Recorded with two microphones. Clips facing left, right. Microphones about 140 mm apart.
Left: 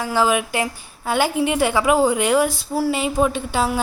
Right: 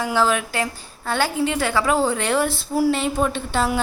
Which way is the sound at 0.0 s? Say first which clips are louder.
Left 1 dB; 10° left (ahead or behind).